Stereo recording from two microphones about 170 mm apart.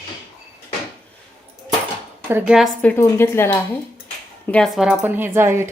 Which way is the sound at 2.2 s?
10° right (ahead or behind).